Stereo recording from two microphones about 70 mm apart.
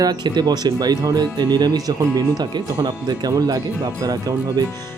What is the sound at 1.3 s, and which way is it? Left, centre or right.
Speech, right.